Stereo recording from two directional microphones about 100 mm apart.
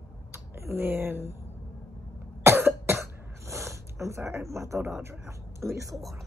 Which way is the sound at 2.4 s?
25° right (ahead or behind).